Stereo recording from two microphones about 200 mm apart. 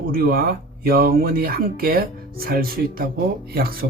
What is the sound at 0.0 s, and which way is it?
Speech, 50° right (ahead or behind).